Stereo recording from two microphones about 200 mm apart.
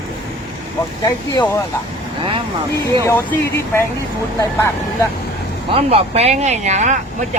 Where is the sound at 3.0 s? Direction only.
10° left (ahead or behind).